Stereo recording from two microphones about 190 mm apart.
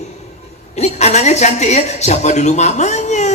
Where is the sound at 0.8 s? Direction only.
35° left (ahead or behind).